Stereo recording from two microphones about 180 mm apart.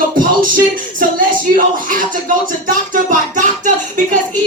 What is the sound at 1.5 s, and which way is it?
Music, 50° right (ahead or behind).